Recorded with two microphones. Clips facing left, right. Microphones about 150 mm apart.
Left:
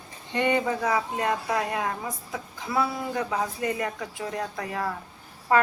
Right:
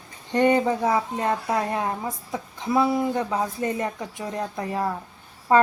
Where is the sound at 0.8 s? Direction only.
25° right (ahead or behind).